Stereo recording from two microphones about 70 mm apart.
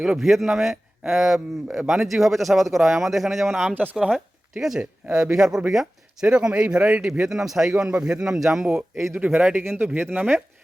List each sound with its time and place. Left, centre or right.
0.0 s speech: centre
9.1 s speech: centre